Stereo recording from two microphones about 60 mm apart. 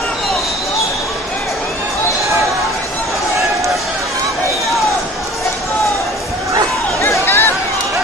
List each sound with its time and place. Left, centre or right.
7.0 s chatter: left